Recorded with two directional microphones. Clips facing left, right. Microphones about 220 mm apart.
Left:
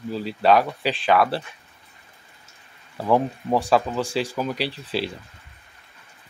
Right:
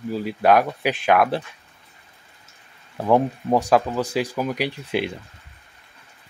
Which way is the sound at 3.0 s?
15° right (ahead or behind).